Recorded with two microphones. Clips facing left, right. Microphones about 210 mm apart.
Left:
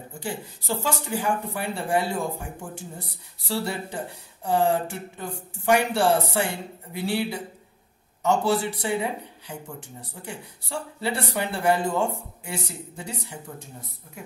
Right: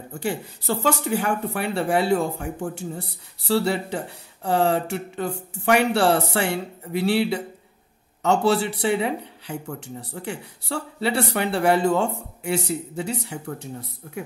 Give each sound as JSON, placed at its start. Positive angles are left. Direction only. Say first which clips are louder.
{"t": 0.2, "sound": "speech", "louder": "right 6 dB", "side_deg": -65}